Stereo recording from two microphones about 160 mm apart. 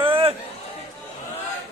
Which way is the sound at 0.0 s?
35° right (ahead or behind).